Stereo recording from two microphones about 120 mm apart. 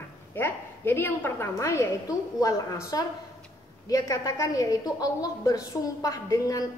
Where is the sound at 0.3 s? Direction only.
20° left (ahead or behind).